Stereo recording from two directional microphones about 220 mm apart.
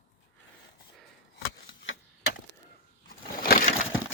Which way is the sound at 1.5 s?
55° left (ahead or behind).